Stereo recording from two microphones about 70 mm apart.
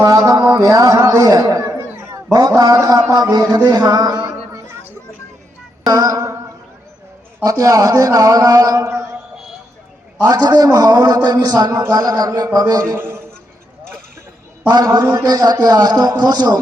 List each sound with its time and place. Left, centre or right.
0.0 s speech: right
1.5 s chatter: right
1.9 s a sound: right
2.1 s a sound: right
2.6 s speech: right
5.8 s music: right
7.4 s speech: right
10.2 s a man's voice: right
11.9 s a man's voice: right
12.8 s a man's voice: right
14.9 s a man's voice: right